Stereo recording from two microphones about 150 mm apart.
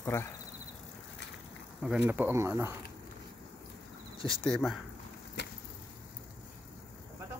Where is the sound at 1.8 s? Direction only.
10° right (ahead or behind).